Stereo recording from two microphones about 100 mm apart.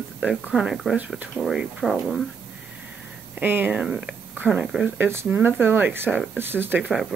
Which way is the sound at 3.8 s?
5° right (ahead or behind).